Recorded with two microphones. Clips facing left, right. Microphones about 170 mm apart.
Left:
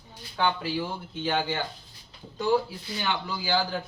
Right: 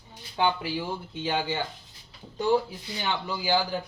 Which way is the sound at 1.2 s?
15° right (ahead or behind).